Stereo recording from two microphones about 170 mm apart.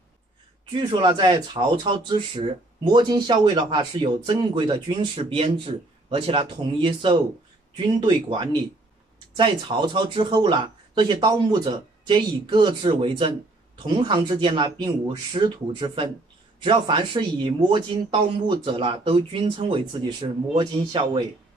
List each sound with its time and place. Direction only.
0.7 s speech: 25° right (ahead or behind)